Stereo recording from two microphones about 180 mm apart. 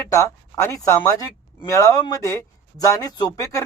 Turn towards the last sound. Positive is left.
turn(degrees=20)  # may be behind; listen again after turning